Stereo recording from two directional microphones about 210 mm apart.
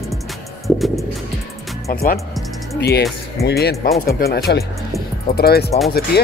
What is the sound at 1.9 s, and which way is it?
Speech, 45° left (ahead or behind).